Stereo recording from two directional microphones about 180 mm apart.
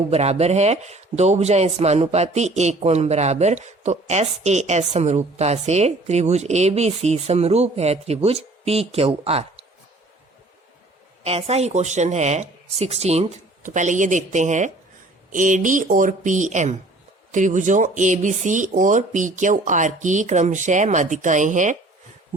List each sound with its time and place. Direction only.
0.1 s speech: 35° right (ahead or behind)
11.2 s speech: 35° right (ahead or behind)